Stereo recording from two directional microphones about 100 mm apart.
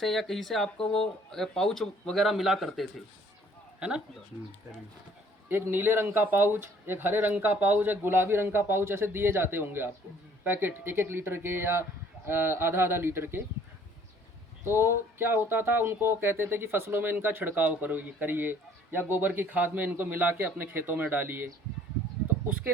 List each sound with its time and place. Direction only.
0.0 s speech: centre (ahead or behind)
5.5 s speech: 20° right (ahead or behind)
14.6 s speech: 25° right (ahead or behind)